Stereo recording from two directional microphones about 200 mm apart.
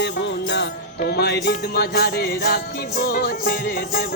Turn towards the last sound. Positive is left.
turn(degrees=45)  # may be behind; listen again after turning